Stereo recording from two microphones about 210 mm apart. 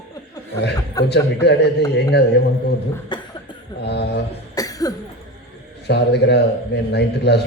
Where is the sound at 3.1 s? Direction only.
20° left (ahead or behind).